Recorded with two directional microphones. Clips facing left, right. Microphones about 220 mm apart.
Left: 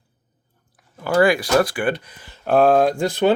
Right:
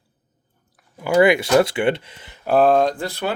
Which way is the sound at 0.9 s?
15° right (ahead or behind).